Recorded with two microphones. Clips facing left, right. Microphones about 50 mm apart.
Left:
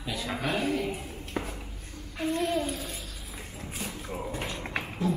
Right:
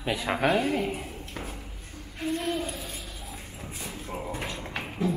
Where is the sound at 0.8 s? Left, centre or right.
Right.